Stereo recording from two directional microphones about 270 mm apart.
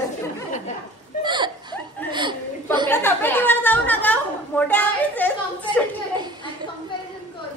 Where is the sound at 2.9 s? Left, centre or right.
Centre.